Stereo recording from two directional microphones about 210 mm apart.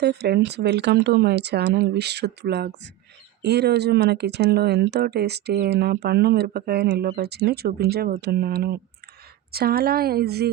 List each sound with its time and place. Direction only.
0.0 s speech: 50° right (ahead or behind)